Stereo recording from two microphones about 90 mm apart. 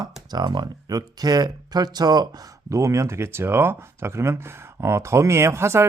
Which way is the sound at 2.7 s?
35° right (ahead or behind).